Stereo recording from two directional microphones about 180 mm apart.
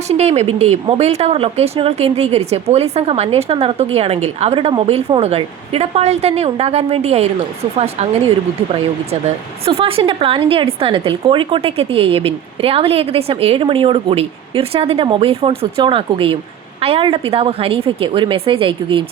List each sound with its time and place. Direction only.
0.1 s speech: 35° right (ahead or behind)
9.6 s a woman's voice: 30° right (ahead or behind)